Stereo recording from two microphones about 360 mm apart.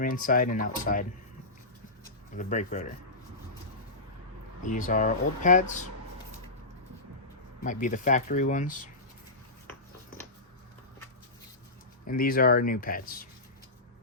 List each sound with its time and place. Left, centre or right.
0.0 s speech: left
2.3 s speech: left
4.6 s speech: left
7.6 s speech: left
12.0 s speech: left